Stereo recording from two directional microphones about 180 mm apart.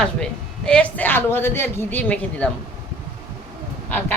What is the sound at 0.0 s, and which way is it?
A woman's voice, 5° left (ahead or behind).